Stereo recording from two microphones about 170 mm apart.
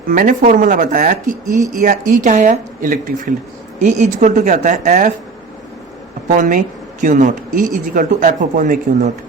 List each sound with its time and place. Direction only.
0.1 s a woman's voice: 50° right (ahead or behind)
6.3 s a woman's voice: 50° right (ahead or behind)